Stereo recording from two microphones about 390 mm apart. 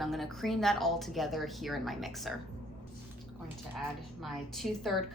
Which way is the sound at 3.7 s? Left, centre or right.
Centre.